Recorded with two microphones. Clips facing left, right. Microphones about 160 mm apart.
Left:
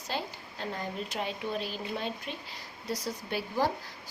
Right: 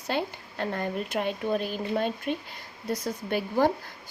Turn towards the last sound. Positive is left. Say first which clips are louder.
# right 6 dB
turn(degrees=-55)  # may be behind; listen again after turning